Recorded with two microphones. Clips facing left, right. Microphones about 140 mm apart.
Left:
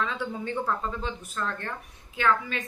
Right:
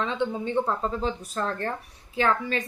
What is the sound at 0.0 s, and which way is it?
A woman's voice, 25° right (ahead or behind).